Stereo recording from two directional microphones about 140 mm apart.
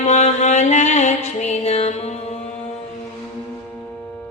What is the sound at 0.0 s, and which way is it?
Music, 55° left (ahead or behind).